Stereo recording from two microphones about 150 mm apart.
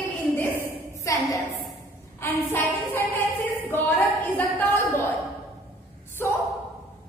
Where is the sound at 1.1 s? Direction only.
20° left (ahead or behind).